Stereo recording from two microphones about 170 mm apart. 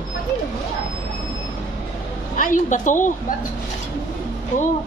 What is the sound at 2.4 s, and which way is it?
Speech, 50° left (ahead or behind).